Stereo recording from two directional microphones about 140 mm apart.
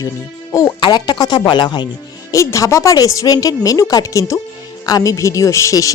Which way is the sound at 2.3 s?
20° left (ahead or behind).